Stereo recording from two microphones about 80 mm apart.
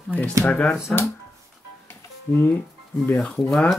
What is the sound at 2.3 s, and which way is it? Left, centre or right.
Speech, left.